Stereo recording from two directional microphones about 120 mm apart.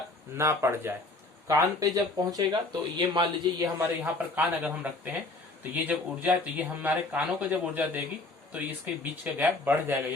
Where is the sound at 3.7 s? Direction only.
15° right (ahead or behind).